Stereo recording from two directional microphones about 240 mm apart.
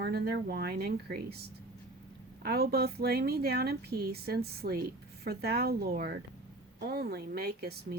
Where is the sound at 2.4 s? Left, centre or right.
Right.